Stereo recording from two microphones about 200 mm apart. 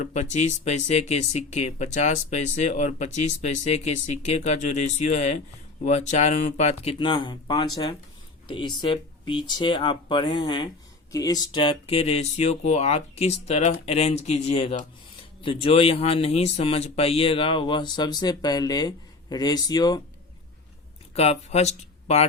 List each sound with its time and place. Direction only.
0.0 s speech: 35° left (ahead or behind); by 20.0 s 20° left (ahead or behind)
21.2 s speech: 30° left (ahead or behind)